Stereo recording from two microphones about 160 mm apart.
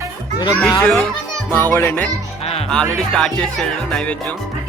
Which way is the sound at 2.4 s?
40° left (ahead or behind).